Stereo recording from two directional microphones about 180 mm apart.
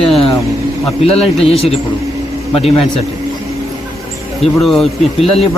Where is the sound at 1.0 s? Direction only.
35° left (ahead or behind).